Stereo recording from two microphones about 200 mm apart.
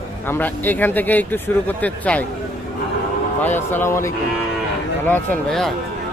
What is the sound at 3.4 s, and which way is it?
A man's voice, 10° left (ahead or behind).